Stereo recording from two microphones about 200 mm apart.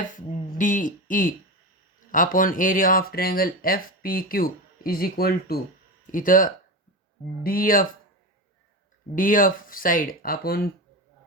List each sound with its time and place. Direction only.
0.6 s speech: 40° left (ahead or behind)
9.1 s speech: 45° left (ahead or behind)